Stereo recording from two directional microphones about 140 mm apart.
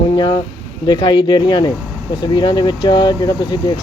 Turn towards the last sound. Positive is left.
turn(degrees=30)  # may be behind; listen again after turning